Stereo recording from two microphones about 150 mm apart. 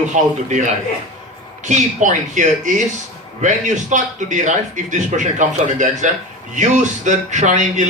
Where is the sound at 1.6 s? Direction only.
55° right (ahead or behind).